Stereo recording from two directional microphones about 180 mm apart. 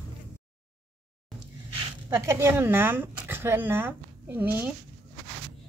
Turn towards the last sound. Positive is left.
turn(degrees=-10)  # may be behind; listen again after turning